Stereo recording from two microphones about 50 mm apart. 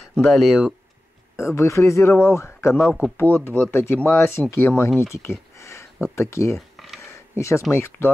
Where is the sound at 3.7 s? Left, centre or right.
Left.